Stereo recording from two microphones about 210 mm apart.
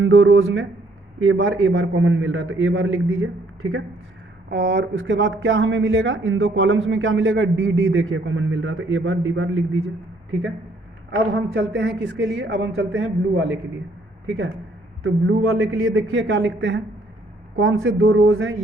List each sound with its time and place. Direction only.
0.0 s speech: 65° right (ahead or behind)
4.4 s speech: 50° right (ahead or behind); by 9.9 s 75° right (ahead or behind)
11.3 s speech: 70° right (ahead or behind)
15.0 s speech: 90° right; by 16.8 s 60° right (ahead or behind)
17.6 s speech: 70° right (ahead or behind)